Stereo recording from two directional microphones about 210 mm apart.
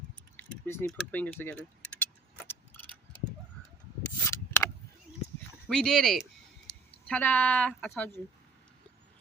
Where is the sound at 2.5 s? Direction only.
10° left (ahead or behind).